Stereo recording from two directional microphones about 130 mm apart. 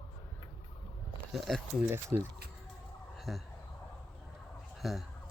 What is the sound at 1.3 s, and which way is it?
Speech, centre (ahead or behind).